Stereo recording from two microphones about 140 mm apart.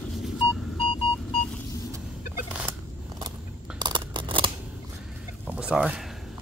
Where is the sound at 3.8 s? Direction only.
35° right (ahead or behind).